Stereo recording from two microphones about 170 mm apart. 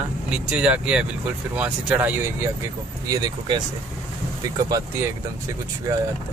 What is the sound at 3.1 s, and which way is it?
Speech, 25° right (ahead or behind).